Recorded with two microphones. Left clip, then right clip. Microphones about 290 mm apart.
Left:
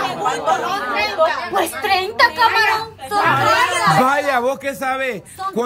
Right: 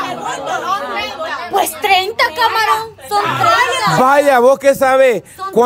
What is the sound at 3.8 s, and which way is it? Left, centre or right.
Speech, centre.